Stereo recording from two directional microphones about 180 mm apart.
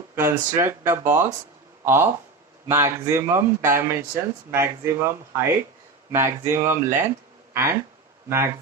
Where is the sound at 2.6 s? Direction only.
15° right (ahead or behind).